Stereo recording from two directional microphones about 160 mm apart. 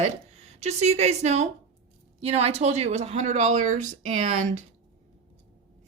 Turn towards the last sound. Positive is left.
turn(degrees=-50)  # may be behind; listen again after turning